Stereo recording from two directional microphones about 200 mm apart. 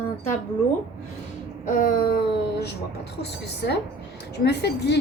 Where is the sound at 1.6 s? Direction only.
40° left (ahead or behind).